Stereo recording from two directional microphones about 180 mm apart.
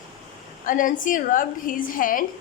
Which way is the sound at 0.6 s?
50° left (ahead or behind).